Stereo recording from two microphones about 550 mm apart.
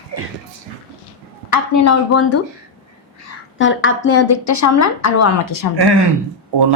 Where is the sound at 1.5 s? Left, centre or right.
Left.